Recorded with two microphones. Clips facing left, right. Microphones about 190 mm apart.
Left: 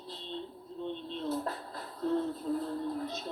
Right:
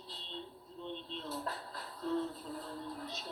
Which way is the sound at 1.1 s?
50° left (ahead or behind).